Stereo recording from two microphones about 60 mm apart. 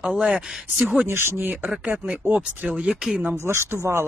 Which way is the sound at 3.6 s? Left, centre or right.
Right.